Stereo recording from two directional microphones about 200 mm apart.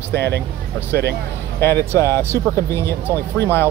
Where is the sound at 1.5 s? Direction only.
10° left (ahead or behind).